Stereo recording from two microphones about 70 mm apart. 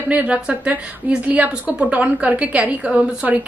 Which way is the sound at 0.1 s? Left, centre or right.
Centre.